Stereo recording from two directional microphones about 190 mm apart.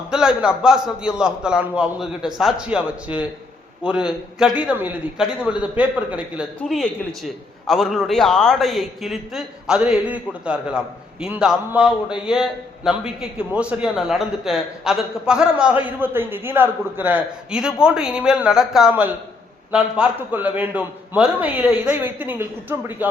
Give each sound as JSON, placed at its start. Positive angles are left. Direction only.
{"t": 0.1, "sound": "a man's voice", "side_deg": -5}
{"t": 6.6, "sound": "a man's voice", "side_deg": 5}